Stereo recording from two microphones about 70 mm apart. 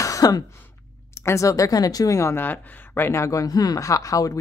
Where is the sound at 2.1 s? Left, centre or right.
Left.